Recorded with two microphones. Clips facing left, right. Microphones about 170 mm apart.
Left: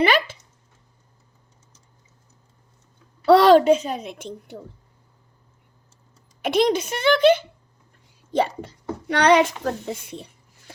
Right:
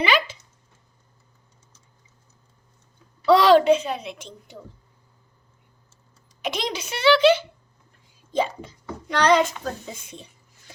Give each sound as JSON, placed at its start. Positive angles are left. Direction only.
{"t": 0.0, "sound": "a sound", "side_deg": 55}
{"t": 3.2, "sound": "a child's voice", "side_deg": 55}
{"t": 6.4, "sound": "a child's voice", "side_deg": 55}
{"t": 8.3, "sound": "a child's voice", "side_deg": 65}